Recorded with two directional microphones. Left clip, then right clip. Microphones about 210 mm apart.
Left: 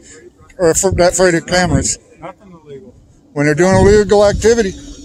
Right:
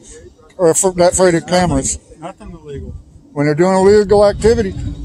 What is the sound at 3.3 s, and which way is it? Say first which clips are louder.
A man's voice: left 1 dB; 20° left (ahead or behind).